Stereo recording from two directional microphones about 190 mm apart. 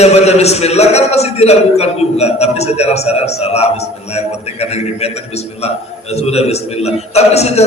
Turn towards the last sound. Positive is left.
turn(degrees=35)  # may be behind; listen again after turning